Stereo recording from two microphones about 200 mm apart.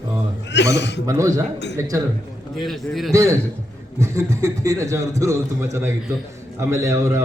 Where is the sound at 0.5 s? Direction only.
60° left (ahead or behind).